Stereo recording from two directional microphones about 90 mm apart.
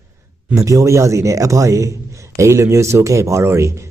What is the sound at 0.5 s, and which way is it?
A man's voice, 35° right (ahead or behind).